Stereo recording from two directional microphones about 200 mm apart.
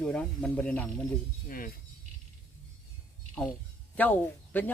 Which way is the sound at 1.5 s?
45° left (ahead or behind).